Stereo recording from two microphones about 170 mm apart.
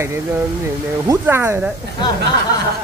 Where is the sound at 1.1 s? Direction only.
15° right (ahead or behind).